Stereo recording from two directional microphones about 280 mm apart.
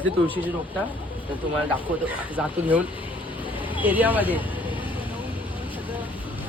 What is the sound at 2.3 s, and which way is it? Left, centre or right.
Speech, centre.